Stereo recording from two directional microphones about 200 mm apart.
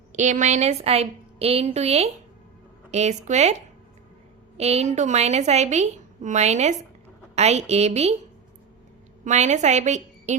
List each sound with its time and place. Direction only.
0.1 s a woman's voice: 35° right (ahead or behind)
9.2 s a woman's voice: 35° right (ahead or behind)